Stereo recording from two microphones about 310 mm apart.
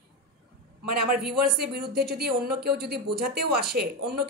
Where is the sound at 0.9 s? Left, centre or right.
Right.